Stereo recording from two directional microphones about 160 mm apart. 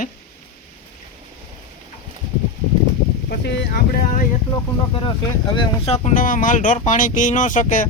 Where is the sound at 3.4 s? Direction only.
90° left.